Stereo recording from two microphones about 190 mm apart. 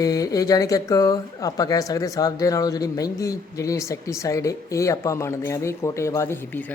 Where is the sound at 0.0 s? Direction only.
20° left (ahead or behind).